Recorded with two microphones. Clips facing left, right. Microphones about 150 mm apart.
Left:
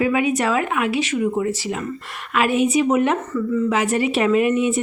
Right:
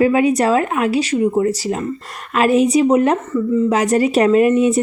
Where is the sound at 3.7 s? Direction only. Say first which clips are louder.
Right 4 dB; 40° right (ahead or behind).